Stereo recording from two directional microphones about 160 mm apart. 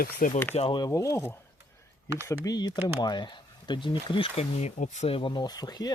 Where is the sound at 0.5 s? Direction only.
35° left (ahead or behind).